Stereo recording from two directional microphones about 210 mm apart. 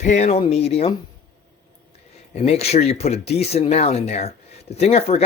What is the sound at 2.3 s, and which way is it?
Speech, 30° left (ahead or behind).